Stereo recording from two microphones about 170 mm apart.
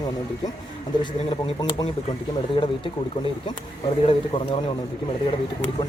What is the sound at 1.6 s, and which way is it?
Speech, 25° left (ahead or behind).